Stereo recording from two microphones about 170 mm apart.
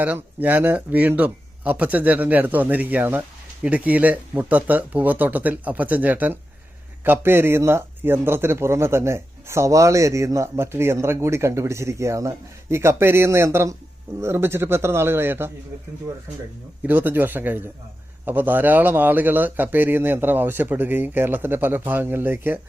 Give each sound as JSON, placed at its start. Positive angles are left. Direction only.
{"t": 0.0, "sound": "speech", "side_deg": -10}
{"t": 16.8, "sound": "speech", "side_deg": -10}